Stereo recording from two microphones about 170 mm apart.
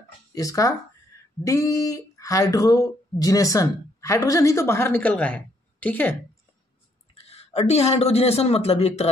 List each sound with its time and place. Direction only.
0.3 s speech: 20° left (ahead or behind)
7.2 s speech: 35° left (ahead or behind)